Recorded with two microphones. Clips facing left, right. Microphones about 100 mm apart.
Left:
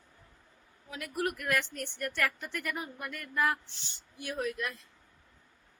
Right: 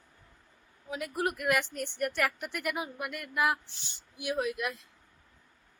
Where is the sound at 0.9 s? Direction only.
20° right (ahead or behind).